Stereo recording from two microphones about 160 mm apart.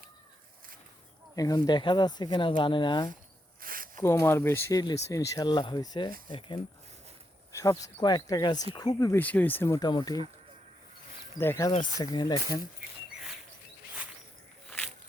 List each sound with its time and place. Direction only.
1.4 s speech: 25° left (ahead or behind)
3.6 s a sound: 60° right (ahead or behind)
4.0 s speech: 15° left (ahead or behind)
11.3 s speech: 15° left (ahead or behind)
11.9 s speech: 30° left (ahead or behind)
14.7 s a sound: 5° left (ahead or behind)